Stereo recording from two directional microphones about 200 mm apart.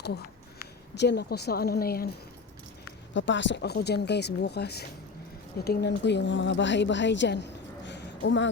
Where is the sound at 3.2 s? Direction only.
65° left (ahead or behind).